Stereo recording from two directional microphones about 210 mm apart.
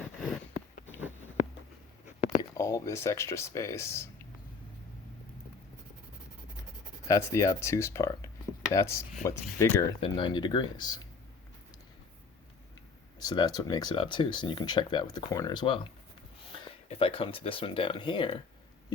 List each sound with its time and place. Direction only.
0.0 s a sound: centre (ahead or behind)
2.4 s speech: 15° left (ahead or behind)
7.1 s speech: 15° left (ahead or behind)
10.0 s speech: 25° left (ahead or behind)
13.1 s speech: 20° left (ahead or behind)